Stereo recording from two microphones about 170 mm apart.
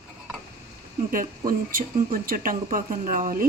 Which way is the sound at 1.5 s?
55° right (ahead or behind).